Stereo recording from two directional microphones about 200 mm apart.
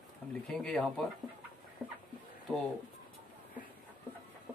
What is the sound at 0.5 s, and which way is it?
Speech, 5° left (ahead or behind).